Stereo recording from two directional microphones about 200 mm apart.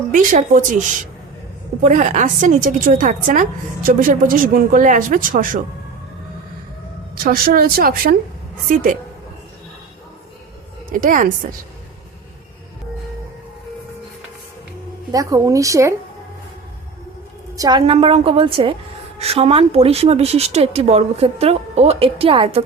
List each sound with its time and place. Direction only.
0.1 s speech: 40° right (ahead or behind)
7.3 s speech: 45° right (ahead or behind)
10.9 s speech: 40° right (ahead or behind)
15.1 s a woman's voice: 15° right (ahead or behind)
17.6 s a woman's voice: 20° right (ahead or behind)